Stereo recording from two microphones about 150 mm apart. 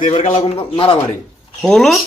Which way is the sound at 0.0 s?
55° left (ahead or behind).